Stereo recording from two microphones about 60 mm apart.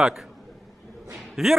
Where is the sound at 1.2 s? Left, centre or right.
Centre.